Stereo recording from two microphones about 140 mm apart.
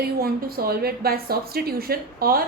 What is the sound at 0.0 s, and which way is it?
A woman's voice, 90° right.